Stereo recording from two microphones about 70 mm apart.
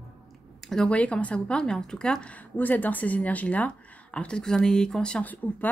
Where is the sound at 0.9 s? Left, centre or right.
Centre.